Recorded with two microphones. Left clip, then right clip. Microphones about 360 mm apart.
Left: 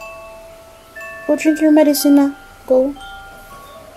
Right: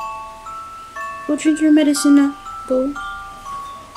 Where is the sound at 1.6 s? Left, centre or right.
Left.